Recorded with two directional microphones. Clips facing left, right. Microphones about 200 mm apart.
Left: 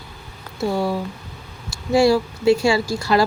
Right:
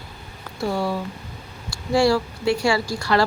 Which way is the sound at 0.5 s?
20° left (ahead or behind).